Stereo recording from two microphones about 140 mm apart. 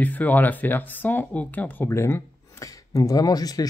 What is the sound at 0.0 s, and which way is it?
Speech, 10° left (ahead or behind).